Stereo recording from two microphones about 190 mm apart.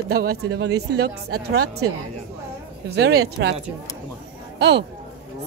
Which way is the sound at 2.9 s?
60° right (ahead or behind).